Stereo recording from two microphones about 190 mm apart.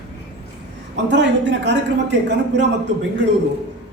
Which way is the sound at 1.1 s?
65° right (ahead or behind).